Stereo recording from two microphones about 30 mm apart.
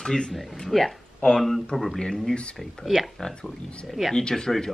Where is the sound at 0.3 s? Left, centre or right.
Centre.